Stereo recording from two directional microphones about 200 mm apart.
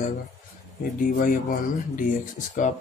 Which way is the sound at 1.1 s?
45° left (ahead or behind).